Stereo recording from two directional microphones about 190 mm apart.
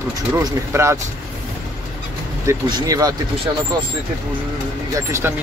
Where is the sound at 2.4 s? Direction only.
20° right (ahead or behind).